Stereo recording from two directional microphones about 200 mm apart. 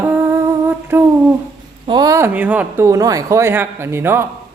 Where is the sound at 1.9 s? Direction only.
20° right (ahead or behind).